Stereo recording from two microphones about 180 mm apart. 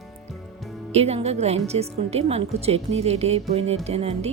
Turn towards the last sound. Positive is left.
turn(degrees=-35)  # may be behind; listen again after turning